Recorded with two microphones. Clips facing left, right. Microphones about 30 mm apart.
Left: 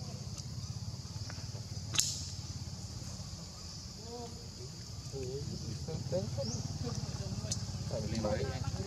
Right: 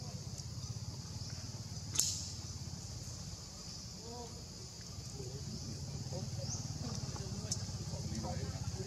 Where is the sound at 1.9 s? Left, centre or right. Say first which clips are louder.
Left 4 dB; left.